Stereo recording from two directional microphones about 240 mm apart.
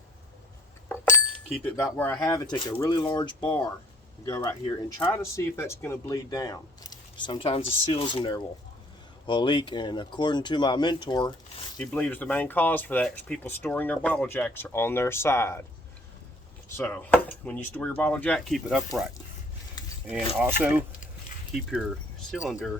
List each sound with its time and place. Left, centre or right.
0.9 s a sound: centre
1.7 s speech: centre
11.8 s speech: centre
16.7 s speech: centre
19.8 s a sound: centre
20.4 s speech: centre